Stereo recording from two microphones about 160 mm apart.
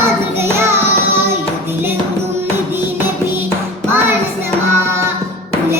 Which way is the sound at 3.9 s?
15° right (ahead or behind).